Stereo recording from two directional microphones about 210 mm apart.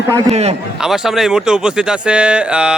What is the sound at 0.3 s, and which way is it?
Speech, 30° right (ahead or behind).